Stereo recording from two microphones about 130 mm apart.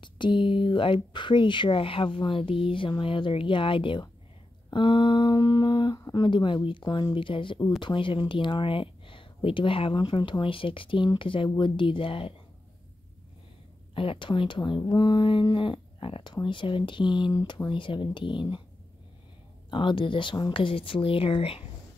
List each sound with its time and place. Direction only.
0.0 s speech: 40° left (ahead or behind)
13.9 s speech: 40° left (ahead or behind)
19.7 s speech: 40° left (ahead or behind)